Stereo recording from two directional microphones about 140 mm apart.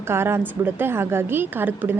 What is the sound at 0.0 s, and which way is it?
A woman's voice, 15° right (ahead or behind).